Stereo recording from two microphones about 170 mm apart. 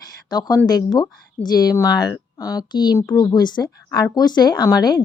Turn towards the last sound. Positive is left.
turn(degrees=25)  # may be behind; listen again after turning